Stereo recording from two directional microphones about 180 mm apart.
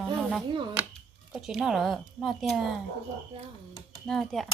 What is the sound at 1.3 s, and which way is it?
A woman's voice, centre (ahead or behind).